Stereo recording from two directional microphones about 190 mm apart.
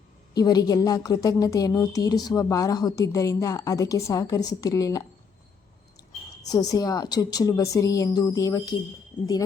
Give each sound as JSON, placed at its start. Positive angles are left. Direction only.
{"t": 0.3, "sound": "a woman's voice", "side_deg": 20}
{"t": 6.5, "sound": "a woman's voice", "side_deg": 20}
{"t": 9.1, "sound": "speech", "side_deg": 10}